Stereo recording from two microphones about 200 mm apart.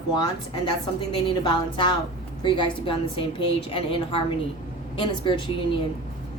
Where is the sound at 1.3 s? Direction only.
25° left (ahead or behind).